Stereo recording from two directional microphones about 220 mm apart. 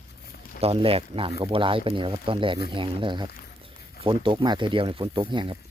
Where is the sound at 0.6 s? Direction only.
25° right (ahead or behind).